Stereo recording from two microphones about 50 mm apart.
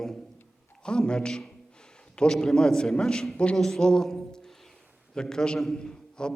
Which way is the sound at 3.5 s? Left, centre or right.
Centre.